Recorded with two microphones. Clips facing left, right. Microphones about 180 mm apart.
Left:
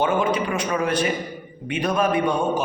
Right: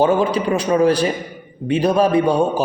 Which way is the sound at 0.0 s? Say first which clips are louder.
Right 5 dB; 35° right (ahead or behind).